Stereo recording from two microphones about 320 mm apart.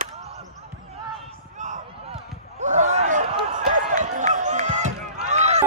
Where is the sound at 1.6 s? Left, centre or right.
Right.